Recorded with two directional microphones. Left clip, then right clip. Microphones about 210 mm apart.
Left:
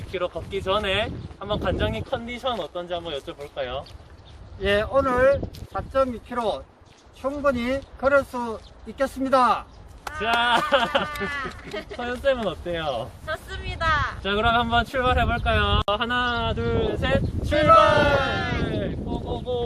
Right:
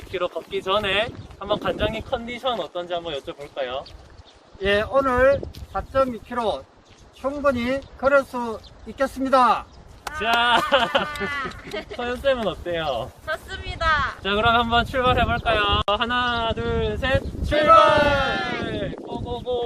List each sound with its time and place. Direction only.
0.1 s speech: 15° right (ahead or behind)
4.6 s speech: centre (ahead or behind)
10.2 s speech: 15° right (ahead or behind)
11.2 s speech: 15° left (ahead or behind)
12.0 s speech: 15° right (ahead or behind)
13.2 s vehicle: 10° left (ahead or behind)
14.2 s speech: 15° right (ahead or behind)
18.2 s speech: 10° left (ahead or behind)
18.6 s speech: 5° right (ahead or behind)